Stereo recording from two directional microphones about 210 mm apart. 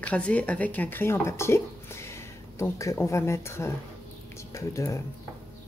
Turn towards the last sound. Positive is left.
turn(degrees=15)  # may be behind; listen again after turning